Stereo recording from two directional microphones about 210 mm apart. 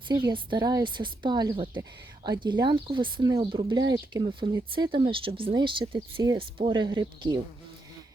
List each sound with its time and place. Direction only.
0.1 s speech: 20° right (ahead or behind)